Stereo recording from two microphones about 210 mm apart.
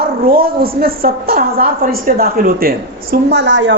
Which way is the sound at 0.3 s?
45° right (ahead or behind).